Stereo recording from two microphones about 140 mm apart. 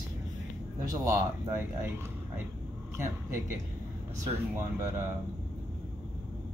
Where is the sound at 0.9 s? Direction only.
20° right (ahead or behind).